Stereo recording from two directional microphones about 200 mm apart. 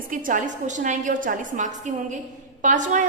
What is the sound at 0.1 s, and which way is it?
A woman's voice, 40° right (ahead or behind).